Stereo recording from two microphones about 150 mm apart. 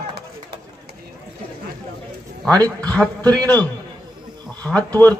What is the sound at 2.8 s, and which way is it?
Speech, 5° left (ahead or behind).